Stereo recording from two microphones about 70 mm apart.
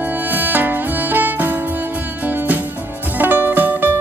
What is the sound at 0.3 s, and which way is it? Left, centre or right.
Music, right.